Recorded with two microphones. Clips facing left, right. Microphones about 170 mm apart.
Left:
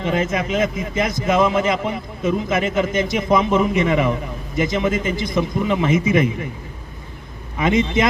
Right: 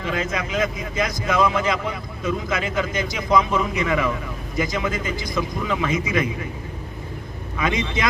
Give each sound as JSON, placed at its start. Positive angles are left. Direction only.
{"t": 0.0, "sound": "a man's voice", "side_deg": 25}